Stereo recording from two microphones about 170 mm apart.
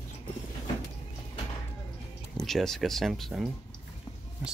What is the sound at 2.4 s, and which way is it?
Speech, centre (ahead or behind).